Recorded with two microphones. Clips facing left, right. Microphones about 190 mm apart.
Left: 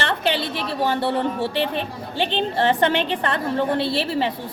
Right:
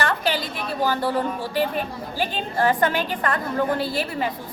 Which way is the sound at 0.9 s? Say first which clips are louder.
Left 1 dB; 25° left (ahead or behind).